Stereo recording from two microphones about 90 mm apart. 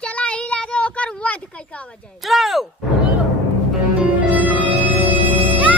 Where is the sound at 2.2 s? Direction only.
Centre (ahead or behind).